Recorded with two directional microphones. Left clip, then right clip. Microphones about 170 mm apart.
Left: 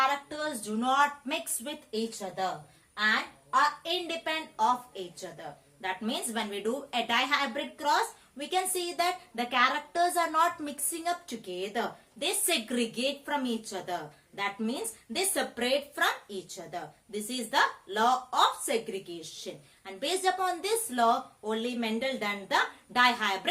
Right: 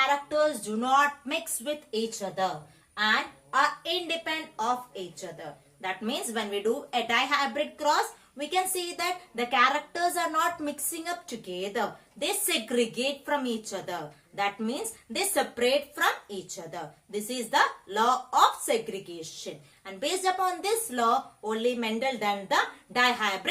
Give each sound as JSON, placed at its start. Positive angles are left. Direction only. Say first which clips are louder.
{"t": 0.3, "sound": "a woman's voice", "louder": "right 9 dB", "side_deg": 15}
{"t": 3.5, "sound": "a woman's voice", "louder": "right 1 dB", "side_deg": 15}